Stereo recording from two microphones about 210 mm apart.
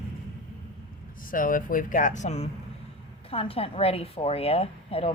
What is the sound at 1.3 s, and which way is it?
A woman's voice, 40° left (ahead or behind).